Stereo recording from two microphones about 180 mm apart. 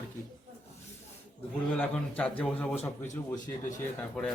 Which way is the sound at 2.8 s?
40° left (ahead or behind).